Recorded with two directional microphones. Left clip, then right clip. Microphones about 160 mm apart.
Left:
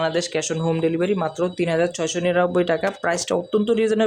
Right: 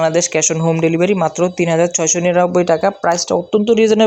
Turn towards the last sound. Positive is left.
turn(degrees=-30)  # may be behind; listen again after turning